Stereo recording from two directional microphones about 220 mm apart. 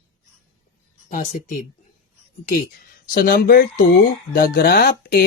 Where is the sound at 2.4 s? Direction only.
40° left (ahead or behind).